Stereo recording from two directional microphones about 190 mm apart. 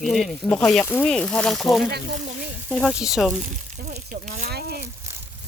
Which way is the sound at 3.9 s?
40° right (ahead or behind).